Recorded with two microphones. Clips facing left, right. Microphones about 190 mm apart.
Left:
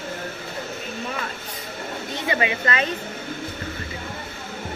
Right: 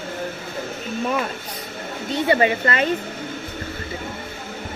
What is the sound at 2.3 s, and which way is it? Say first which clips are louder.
Speech: right 5 dB; 35° right (ahead or behind).